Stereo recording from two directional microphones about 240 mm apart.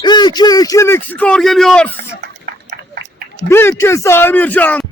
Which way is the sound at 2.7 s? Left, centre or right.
Right.